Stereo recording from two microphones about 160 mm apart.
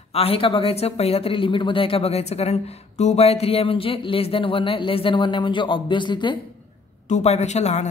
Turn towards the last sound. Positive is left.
turn(degrees=45)  # may be behind; listen again after turning